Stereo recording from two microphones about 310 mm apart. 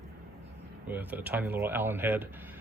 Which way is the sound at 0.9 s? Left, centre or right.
Centre.